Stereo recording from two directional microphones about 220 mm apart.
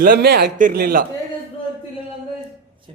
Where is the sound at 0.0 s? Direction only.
45° right (ahead or behind).